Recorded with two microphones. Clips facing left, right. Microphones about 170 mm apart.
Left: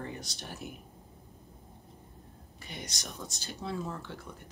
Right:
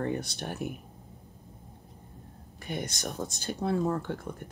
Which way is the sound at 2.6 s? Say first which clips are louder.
Right 9 dB; 55° right (ahead or behind).